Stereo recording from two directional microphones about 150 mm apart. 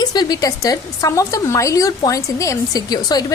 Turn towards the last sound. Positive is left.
turn(degrees=25)  # may be behind; listen again after turning